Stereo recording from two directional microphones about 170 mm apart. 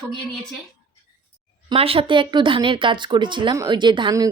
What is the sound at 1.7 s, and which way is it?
Speech, 35° right (ahead or behind).